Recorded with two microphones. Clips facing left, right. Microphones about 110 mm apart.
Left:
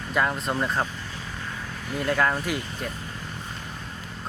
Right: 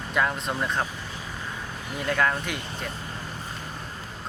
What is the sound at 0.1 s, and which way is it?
Speech, centre (ahead or behind).